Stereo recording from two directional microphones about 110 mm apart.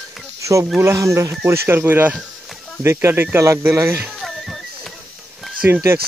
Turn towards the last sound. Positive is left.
turn(degrees=-20)  # may be behind; listen again after turning